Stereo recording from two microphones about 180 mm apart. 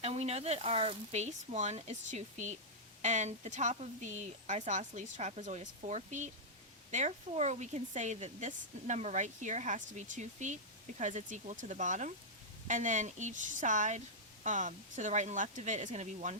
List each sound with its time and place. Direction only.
0.0 s speech: 35° right (ahead or behind)